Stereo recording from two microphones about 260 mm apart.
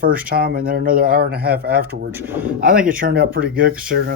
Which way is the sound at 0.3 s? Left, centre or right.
Right.